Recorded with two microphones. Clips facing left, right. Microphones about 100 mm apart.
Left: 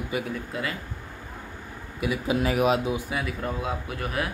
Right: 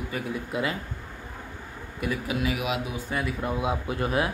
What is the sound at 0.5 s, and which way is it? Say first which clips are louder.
Speech: right 4 dB; 20° right (ahead or behind).